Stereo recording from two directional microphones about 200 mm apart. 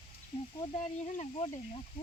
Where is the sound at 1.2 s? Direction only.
30° left (ahead or behind).